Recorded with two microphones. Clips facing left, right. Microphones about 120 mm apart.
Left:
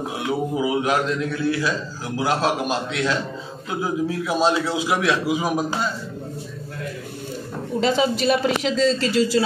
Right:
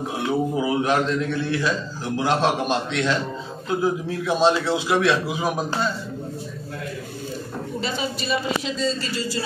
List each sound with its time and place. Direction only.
0.3 s a man's voice: 5° left (ahead or behind)
7.8 s speech: 90° left